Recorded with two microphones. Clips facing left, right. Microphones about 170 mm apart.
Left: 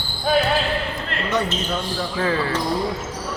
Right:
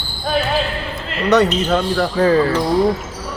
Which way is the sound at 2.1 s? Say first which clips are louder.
Right 8 dB; 40° right (ahead or behind).